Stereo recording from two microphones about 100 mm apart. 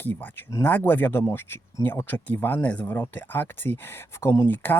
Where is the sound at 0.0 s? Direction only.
20° left (ahead or behind).